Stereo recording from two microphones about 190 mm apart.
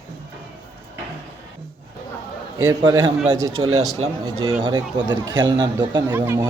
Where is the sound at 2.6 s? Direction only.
15° right (ahead or behind).